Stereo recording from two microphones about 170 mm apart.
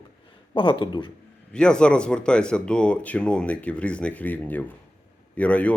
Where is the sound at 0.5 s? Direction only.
25° left (ahead or behind).